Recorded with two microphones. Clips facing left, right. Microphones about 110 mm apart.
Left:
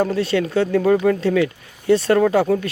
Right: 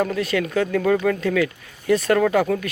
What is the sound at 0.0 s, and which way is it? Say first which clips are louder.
Speech: left 3 dB; 30° left (ahead or behind).